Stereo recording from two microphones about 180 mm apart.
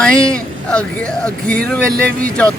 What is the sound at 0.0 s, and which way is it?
Speech, 5° left (ahead or behind).